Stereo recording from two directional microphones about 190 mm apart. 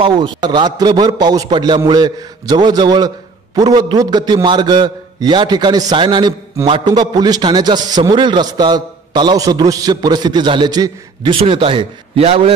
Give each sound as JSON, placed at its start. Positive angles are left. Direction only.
{"t": 0.0, "sound": "a man's voice", "side_deg": -25}